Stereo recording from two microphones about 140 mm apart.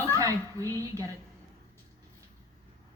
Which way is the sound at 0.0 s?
25° right (ahead or behind).